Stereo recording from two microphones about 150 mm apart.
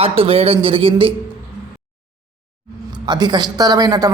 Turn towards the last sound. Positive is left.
turn(degrees=-25)  # may be behind; listen again after turning